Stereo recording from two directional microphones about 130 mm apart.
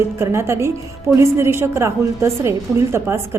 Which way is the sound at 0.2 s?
20° right (ahead or behind).